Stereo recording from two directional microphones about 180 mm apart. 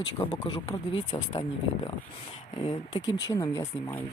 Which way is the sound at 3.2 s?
20° left (ahead or behind).